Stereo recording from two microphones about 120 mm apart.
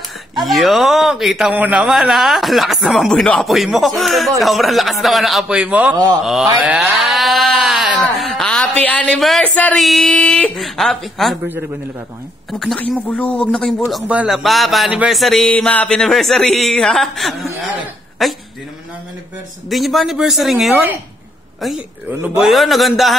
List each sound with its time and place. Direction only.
0.4 s speech: centre (ahead or behind)
6.8 s a sound: centre (ahead or behind)
9.8 s speech: centre (ahead or behind)
12.4 s speech: centre (ahead or behind)
12.9 s speech: 10° left (ahead or behind)
14.9 s speech: 10° right (ahead or behind)
15.1 s speech: centre (ahead or behind)
19.7 s speech: centre (ahead or behind)
20.7 s speech: 15° right (ahead or behind)
22.4 s speech: centre (ahead or behind)